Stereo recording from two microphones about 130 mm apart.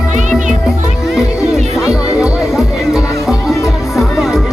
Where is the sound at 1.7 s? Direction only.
5° right (ahead or behind).